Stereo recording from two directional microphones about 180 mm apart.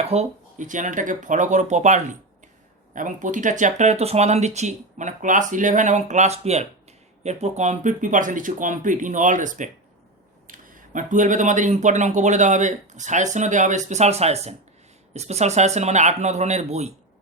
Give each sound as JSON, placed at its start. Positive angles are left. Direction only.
{"t": 0.0, "sound": "speech", "side_deg": -35}